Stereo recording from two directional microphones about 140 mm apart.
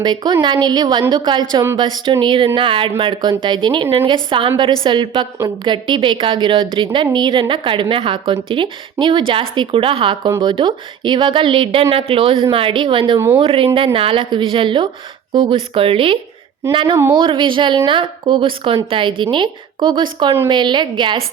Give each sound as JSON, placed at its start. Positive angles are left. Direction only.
{"t": 0.0, "sound": "a woman's voice", "side_deg": -30}